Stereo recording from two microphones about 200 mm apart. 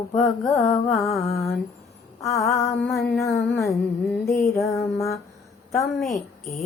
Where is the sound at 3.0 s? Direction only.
15° left (ahead or behind).